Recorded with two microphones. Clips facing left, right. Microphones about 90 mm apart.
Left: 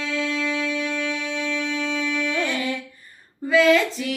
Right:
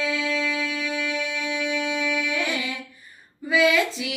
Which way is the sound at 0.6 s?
35° left (ahead or behind).